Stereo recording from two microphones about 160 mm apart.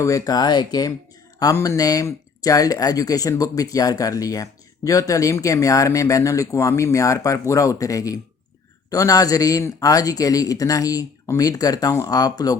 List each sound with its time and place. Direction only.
0.0 s speech: 20° left (ahead or behind)